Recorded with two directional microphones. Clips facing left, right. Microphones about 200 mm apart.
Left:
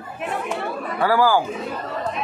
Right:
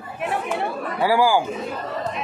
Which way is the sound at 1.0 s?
15° right (ahead or behind).